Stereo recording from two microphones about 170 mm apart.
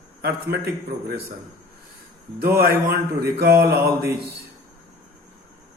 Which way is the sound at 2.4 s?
65° right (ahead or behind).